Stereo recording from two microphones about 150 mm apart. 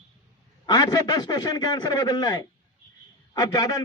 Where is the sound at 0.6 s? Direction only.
30° left (ahead or behind).